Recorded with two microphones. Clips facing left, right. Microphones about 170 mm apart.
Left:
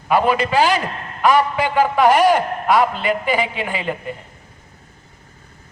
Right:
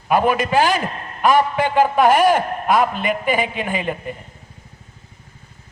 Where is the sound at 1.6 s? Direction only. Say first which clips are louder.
Even; 20° right (ahead or behind).